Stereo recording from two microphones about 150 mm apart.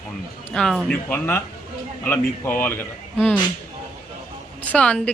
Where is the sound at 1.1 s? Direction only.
15° left (ahead or behind).